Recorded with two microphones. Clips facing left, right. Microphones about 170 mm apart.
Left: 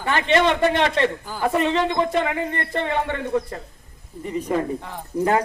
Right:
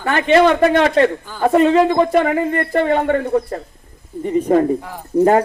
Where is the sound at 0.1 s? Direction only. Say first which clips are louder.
Right 6 dB; 35° right (ahead or behind).